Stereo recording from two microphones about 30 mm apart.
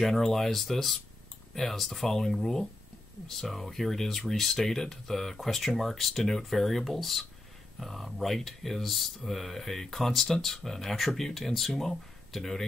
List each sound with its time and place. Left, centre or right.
0.1 s speech: centre